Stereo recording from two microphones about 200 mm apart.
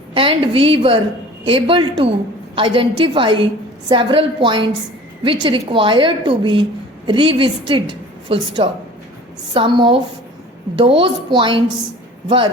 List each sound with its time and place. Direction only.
0.1 s a woman's voice: 25° right (ahead or behind)